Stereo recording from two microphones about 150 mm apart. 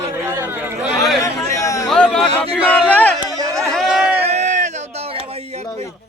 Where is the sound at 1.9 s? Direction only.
5° left (ahead or behind).